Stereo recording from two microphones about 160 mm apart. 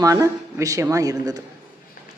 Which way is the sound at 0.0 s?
20° right (ahead or behind).